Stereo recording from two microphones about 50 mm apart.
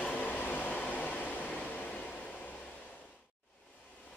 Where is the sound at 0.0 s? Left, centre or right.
Left.